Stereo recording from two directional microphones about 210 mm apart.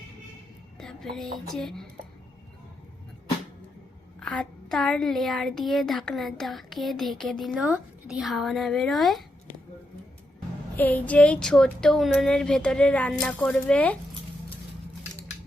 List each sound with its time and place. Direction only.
0.8 s speech: centre (ahead or behind)
4.2 s a woman's voice: 5° left (ahead or behind)
10.8 s a woman's voice: 10° left (ahead or behind)